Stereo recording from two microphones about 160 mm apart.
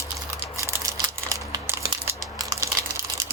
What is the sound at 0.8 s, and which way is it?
Crumpling, 20° right (ahead or behind).